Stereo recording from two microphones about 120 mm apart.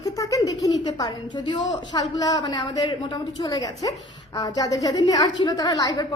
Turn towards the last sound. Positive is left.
turn(degrees=35)  # may be behind; listen again after turning